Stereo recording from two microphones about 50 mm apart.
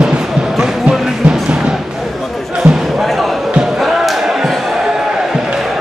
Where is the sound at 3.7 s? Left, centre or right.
Centre.